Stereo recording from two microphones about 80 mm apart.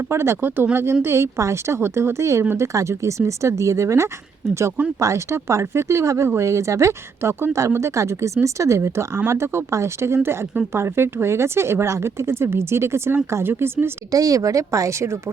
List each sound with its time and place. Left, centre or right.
0.1 s speech: right
2.7 s speech: right
14.1 s speech: right